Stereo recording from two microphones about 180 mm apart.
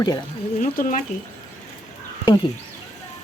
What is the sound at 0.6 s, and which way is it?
Speech, 45° left (ahead or behind).